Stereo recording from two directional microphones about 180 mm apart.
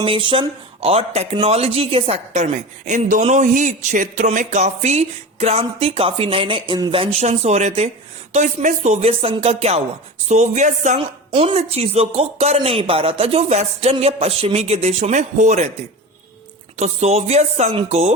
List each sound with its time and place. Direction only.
0.0 s speech: 30° right (ahead or behind)
16.7 s speech: 40° right (ahead or behind)